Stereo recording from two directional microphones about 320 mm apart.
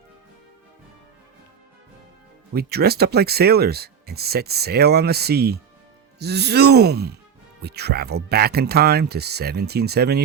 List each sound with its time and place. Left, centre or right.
2.6 s speech: right